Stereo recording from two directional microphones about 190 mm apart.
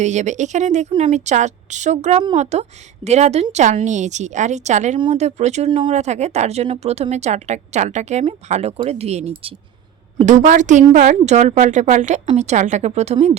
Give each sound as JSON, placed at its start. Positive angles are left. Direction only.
{"t": 0.0, "sound": "speech", "side_deg": -40}